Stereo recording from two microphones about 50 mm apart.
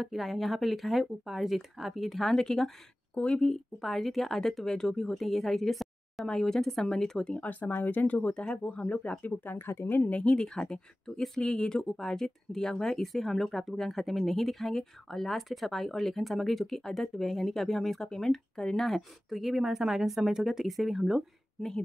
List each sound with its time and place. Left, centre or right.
0.0 s speech: centre
7.3 s speech: left
9.2 s speech: left
9.9 s speech: left
10.2 s speech: centre